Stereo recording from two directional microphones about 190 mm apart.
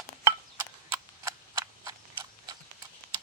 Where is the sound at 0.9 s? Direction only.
15° right (ahead or behind).